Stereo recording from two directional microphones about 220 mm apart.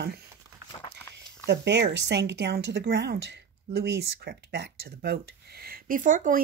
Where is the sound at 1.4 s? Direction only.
50° right (ahead or behind).